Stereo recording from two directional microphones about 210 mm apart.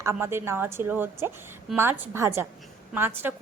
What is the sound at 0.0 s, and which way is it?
A woman's voice, 10° right (ahead or behind).